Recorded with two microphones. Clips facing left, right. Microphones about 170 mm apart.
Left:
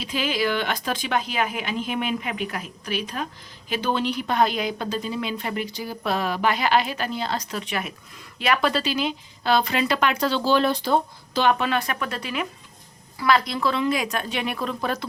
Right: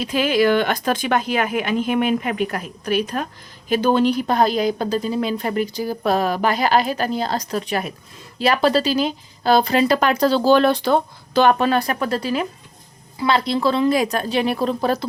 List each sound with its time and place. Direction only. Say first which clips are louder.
0.0 s a woman's voice: right 7 dB; 50° right (ahead or behind)
10.6 s speech: right 5 dB; 65° right (ahead or behind)
11.5 s a woman's voice: right 6 dB; 40° right (ahead or behind)